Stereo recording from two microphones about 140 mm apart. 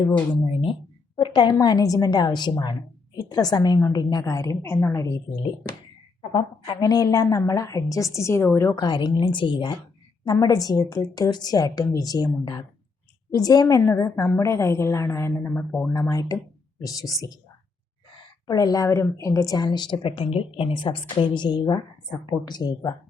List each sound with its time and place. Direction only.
0.6 s a sound: 35° left (ahead or behind)
1.5 s a woman's voice: 25° left (ahead or behind)
6.7 s a woman's voice: 25° left (ahead or behind)
8.8 s a woman's voice: 30° left (ahead or behind)
18.4 s a woman's voice: 25° left (ahead or behind)